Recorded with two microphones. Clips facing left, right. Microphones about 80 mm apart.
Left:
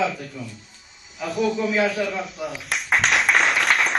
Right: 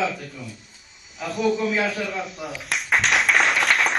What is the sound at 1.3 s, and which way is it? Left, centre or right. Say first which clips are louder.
Speech: even; centre.